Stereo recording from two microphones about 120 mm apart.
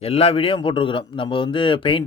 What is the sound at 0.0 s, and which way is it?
A man's voice, 55° left (ahead or behind).